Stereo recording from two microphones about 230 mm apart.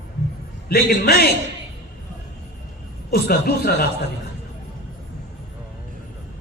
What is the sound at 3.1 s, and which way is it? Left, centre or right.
Speech, left.